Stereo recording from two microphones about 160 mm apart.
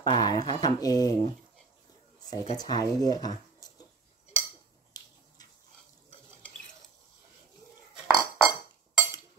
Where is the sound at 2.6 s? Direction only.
25° left (ahead or behind).